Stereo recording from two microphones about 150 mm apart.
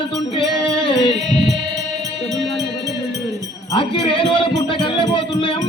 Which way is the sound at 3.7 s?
35° left (ahead or behind).